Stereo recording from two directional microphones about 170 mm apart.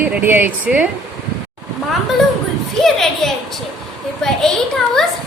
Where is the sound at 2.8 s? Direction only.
Centre (ahead or behind).